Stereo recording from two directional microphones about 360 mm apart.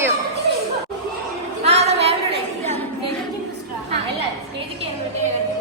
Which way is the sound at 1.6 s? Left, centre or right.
Centre.